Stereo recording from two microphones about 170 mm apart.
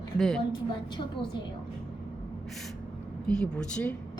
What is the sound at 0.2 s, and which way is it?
Speech, centre (ahead or behind).